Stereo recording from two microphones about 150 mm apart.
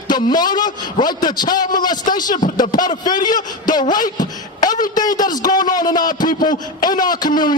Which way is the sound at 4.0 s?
65° left (ahead or behind).